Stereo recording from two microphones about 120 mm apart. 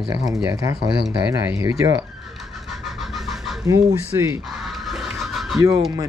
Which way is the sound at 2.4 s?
Centre (ahead or behind).